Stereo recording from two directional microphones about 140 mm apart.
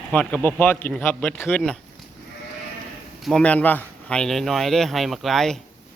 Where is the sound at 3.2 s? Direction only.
Centre (ahead or behind).